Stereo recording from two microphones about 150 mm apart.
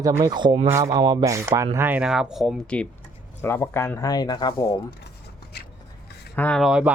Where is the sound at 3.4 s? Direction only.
15° left (ahead or behind).